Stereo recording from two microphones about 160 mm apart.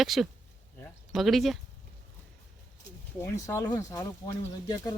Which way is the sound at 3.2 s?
15° left (ahead or behind).